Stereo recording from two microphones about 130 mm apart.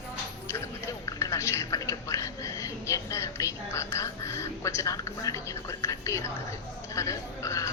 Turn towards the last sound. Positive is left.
turn(degrees=25)  # may be behind; listen again after turning